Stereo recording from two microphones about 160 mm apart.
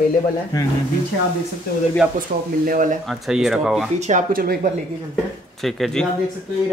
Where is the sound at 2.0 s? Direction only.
10° right (ahead or behind).